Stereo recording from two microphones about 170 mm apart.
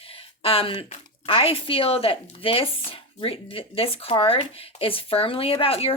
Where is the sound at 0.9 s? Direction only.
35° left (ahead or behind).